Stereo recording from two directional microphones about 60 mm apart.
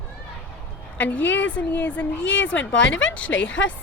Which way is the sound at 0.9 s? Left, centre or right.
Left.